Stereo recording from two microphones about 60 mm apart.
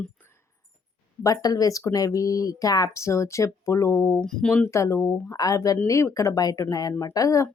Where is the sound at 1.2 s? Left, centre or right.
Left.